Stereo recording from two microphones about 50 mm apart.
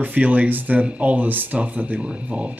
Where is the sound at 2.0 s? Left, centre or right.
Right.